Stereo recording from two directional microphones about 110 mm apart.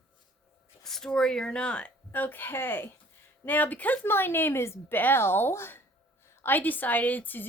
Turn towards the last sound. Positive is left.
turn(degrees=15)  # may be behind; listen again after turning